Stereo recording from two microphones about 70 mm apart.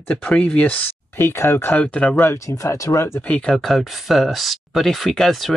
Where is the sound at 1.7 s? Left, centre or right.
Left.